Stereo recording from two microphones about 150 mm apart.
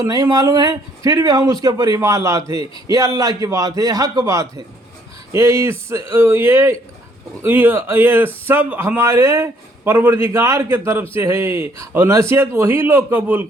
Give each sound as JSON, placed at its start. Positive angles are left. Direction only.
{"t": 0.0, "sound": "a man's voice", "side_deg": -25}